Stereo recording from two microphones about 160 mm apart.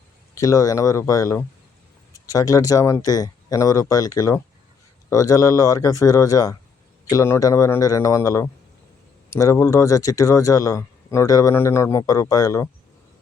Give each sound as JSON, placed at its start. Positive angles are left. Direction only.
{"t": 0.3, "sound": "speech", "side_deg": 20}